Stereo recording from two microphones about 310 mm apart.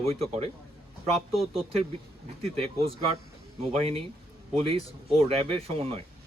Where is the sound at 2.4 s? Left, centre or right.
Centre.